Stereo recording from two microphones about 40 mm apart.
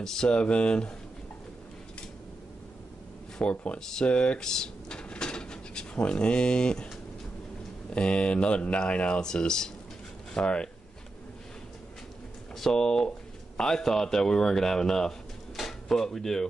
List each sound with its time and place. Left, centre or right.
0.3 s speech: left
3.4 s speech: left
4.4 s drawer open or close: centre
5.9 s speech: left
7.9 s speech: left
9.2 s speech: centre
12.5 s speech: centre
15.5 s drawer open or close: centre